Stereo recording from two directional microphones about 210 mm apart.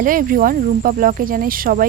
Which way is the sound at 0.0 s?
40° right (ahead or behind).